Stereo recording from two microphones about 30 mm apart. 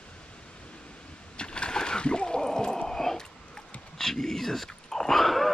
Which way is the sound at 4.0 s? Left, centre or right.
Centre.